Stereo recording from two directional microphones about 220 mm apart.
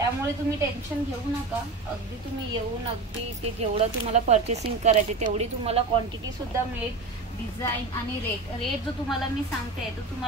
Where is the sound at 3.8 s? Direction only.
30° right (ahead or behind).